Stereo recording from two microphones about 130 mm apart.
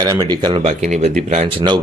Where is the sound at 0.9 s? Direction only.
65° right (ahead or behind).